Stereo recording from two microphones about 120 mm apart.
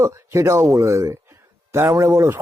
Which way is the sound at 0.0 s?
25° right (ahead or behind).